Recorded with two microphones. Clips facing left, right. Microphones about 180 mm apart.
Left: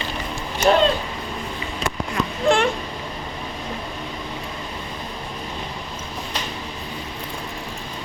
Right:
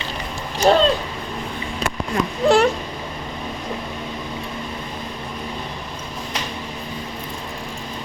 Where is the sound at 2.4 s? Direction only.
35° right (ahead or behind).